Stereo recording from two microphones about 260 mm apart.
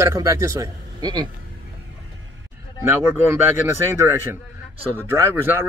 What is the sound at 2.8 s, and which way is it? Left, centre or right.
Speech, centre.